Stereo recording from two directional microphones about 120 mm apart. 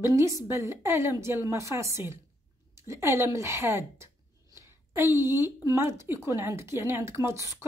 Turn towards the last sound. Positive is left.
turn(degrees=-20)  # may be behind; listen again after turning